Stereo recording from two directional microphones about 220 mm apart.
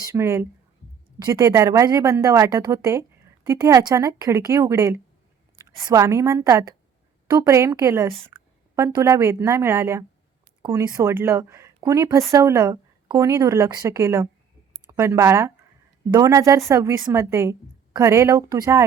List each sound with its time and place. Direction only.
0.1 s a woman's voice: 10° right (ahead or behind)
8.3 s a sound: 20° right (ahead or behind)
8.7 s a woman's voice: 10° right (ahead or behind)